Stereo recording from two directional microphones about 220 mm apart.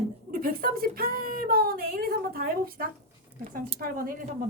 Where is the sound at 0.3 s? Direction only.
40° right (ahead or behind).